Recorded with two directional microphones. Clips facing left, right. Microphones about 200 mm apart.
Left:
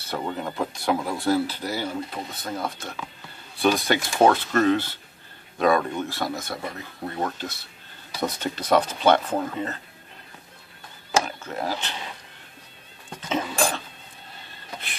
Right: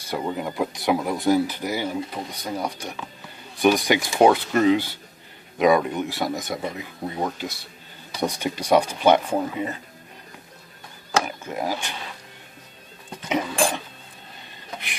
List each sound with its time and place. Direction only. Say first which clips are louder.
0.0 s speech: right 2 dB; 10° right (ahead or behind)
11.2 s speech: right 2 dB; 10° right (ahead or behind)
13.3 s cough: right 2 dB; 15° right (ahead or behind)